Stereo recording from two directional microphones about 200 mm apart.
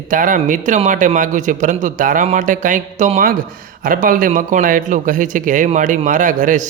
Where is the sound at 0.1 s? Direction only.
40° right (ahead or behind).